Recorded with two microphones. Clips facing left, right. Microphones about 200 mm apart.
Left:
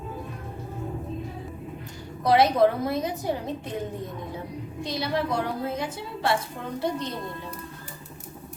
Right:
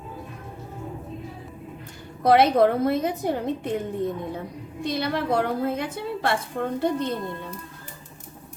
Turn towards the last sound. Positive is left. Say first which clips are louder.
# right 5 dB
turn(degrees=-55)  # may be behind; listen again after turning